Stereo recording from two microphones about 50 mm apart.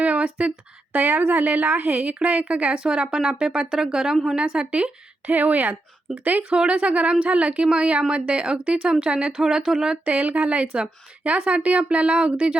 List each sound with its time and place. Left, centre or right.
0.0 s a sound: right
0.9 s a woman's voice: right; by 10.0 s centre
10.1 s a woman's voice: right